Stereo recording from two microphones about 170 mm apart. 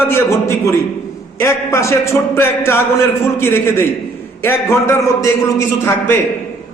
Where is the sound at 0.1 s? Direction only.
15° left (ahead or behind).